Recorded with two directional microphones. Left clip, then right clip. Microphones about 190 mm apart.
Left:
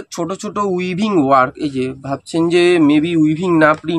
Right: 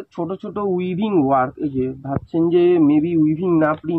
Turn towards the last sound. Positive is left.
turn(degrees=35)  # may be behind; listen again after turning